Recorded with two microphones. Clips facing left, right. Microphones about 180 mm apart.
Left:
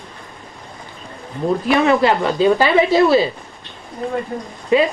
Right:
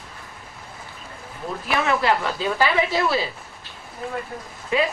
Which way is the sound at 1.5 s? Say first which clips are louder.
Left 9 dB; 25° left (ahead or behind).